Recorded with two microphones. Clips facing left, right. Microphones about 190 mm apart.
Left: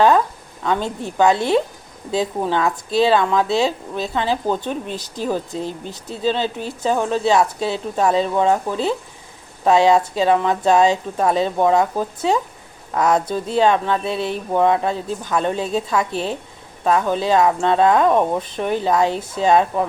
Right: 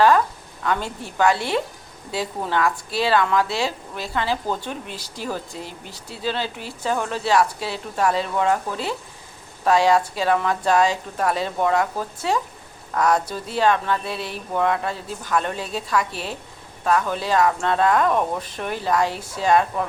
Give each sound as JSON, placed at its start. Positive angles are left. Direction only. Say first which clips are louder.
{"t": 0.6, "sound": "speech", "louder": "left 4 dB", "side_deg": 20}